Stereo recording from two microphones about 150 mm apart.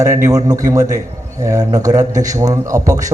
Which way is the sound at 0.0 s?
20° right (ahead or behind).